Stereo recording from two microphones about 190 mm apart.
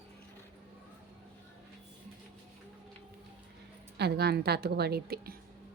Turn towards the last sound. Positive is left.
turn(degrees=-55)  # may be behind; listen again after turning